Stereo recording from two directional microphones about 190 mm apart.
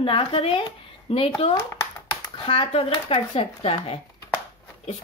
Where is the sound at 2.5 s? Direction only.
30° left (ahead or behind).